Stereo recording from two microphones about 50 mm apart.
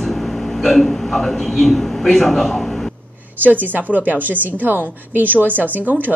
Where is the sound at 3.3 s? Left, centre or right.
Right.